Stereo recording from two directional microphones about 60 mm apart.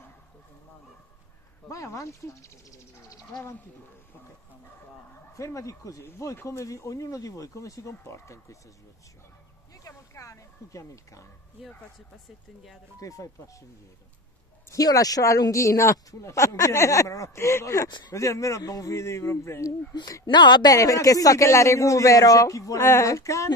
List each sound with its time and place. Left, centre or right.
1.7 s speech: left
5.1 s speech: left
6.0 s a sound: left
6.6 s speech: left
9.8 s speech: left
13.0 s speech: left
14.7 s speech: left
18.9 s a sound: left
20.6 s speech: left